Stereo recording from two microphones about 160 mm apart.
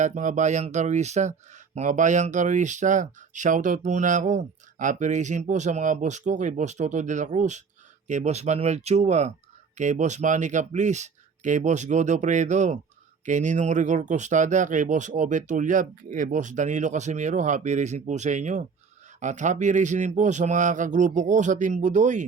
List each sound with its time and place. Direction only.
0.0 s speech: 50° right (ahead or behind)